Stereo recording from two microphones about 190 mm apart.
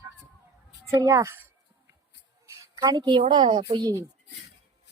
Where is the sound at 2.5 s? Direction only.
20° right (ahead or behind).